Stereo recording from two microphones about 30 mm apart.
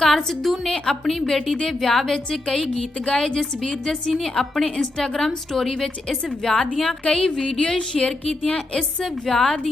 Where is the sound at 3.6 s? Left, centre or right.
Left.